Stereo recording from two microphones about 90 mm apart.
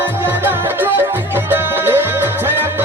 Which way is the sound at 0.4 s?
25° right (ahead or behind).